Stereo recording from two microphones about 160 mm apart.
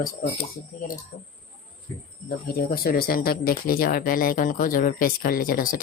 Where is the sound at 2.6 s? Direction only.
70° left (ahead or behind).